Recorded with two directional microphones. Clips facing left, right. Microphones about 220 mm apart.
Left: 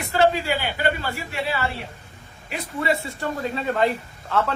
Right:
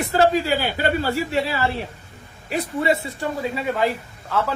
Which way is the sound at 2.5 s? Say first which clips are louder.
Right 4 dB; 25° right (ahead or behind).